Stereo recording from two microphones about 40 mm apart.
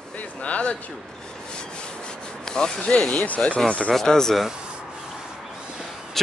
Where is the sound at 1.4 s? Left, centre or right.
Left.